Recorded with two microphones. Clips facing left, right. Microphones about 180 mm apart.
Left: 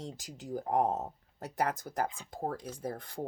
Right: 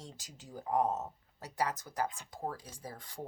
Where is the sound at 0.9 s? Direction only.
30° left (ahead or behind).